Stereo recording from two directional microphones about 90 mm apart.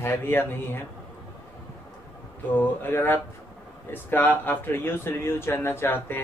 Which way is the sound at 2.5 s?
25° left (ahead or behind).